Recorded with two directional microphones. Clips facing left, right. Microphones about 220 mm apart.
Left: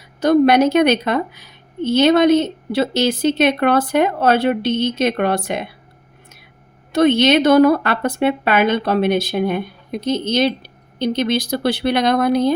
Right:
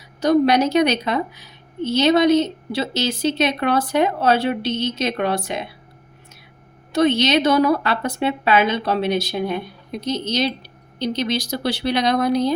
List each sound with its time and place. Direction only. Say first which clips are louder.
0.2 s a woman's voice: left 3 dB; 55° left (ahead or behind)
6.9 s a woman's voice: left 4 dB; 55° left (ahead or behind)